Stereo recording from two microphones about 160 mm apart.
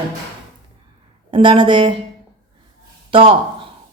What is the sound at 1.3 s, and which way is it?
Speech, 30° right (ahead or behind).